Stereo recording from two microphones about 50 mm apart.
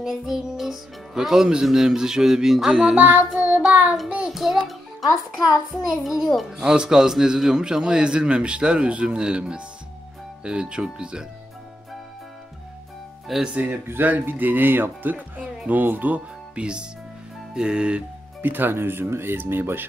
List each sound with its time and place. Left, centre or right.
0.0 s a man's voice: centre
3.0 s speech: right
4.3 s a man's voice: centre
13.3 s speech: centre
13.8 s speech: right
16.5 s speech: centre
18.4 s speech: right